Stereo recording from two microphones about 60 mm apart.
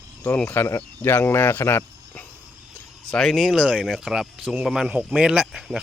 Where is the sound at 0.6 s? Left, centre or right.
Left.